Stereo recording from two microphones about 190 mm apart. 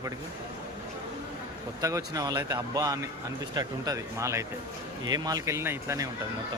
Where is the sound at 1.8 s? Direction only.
20° right (ahead or behind).